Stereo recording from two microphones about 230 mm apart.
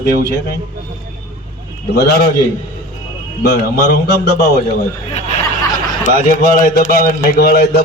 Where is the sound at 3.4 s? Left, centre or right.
Left.